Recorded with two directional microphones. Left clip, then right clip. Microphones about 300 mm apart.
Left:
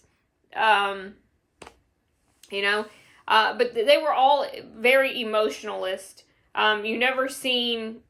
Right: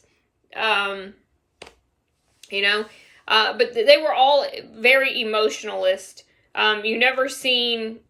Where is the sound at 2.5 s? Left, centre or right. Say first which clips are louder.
Right 4 dB; centre.